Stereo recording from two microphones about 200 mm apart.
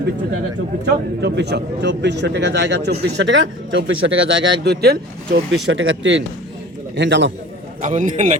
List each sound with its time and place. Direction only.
1.2 s speech: 55° right (ahead or behind)
5.6 s speech: 70° right (ahead or behind)
7.8 s a man's voice: 40° right (ahead or behind)